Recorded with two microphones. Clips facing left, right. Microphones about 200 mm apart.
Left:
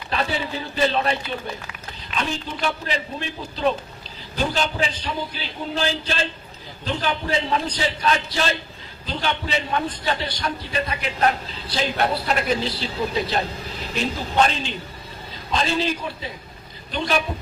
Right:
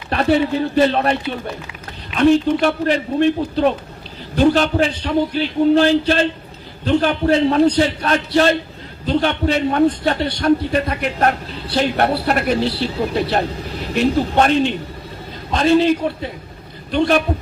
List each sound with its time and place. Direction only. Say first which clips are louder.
0.1 s a man's voice: right 10 dB; 55° right (ahead or behind)
2.1 s a man's voice: right 15 dB; 60° right (ahead or behind)